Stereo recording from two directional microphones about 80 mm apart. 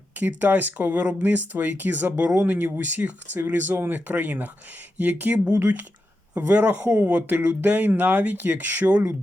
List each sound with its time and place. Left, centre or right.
0.2 s speech: right